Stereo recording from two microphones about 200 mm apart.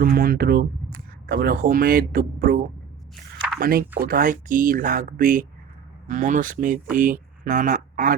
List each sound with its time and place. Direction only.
0.0 s speech: 45° right (ahead or behind)